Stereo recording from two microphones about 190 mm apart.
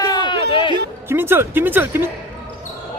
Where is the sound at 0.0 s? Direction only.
20° left (ahead or behind).